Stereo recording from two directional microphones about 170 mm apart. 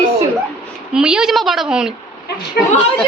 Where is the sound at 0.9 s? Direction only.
5° right (ahead or behind).